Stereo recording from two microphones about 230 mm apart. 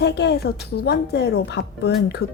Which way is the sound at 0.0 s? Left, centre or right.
Left.